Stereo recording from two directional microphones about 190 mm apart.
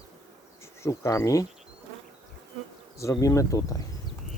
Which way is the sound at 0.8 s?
15° left (ahead or behind).